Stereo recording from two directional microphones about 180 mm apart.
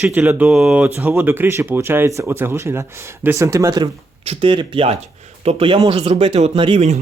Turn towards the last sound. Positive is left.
turn(degrees=-35)  # may be behind; listen again after turning